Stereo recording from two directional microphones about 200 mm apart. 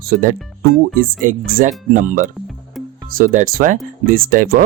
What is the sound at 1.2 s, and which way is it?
Speech, 40° right (ahead or behind).